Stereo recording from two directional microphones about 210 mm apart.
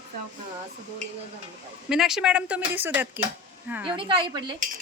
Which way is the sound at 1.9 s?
Centre (ahead or behind).